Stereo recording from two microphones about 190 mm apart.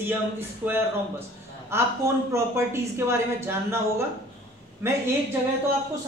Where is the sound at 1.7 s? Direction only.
15° right (ahead or behind).